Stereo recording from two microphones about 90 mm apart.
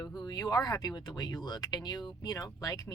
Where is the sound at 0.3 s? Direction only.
45° left (ahead or behind).